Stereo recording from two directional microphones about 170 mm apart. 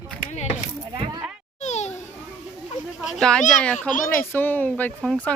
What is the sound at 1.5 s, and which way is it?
Children playing, 40° left (ahead or behind).